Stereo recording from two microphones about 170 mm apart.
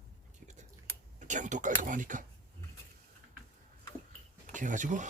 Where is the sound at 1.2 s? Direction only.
45° right (ahead or behind).